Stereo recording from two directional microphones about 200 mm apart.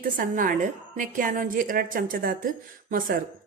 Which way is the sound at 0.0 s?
40° right (ahead or behind).